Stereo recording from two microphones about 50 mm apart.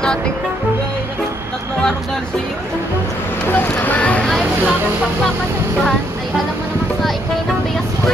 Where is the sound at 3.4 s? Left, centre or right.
Left.